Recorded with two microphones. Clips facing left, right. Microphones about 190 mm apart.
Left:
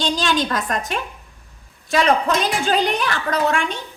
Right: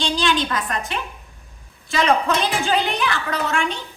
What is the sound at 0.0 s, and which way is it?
Speech, 45° left (ahead or behind).